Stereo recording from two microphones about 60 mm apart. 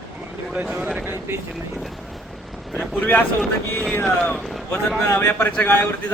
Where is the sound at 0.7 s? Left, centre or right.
Centre.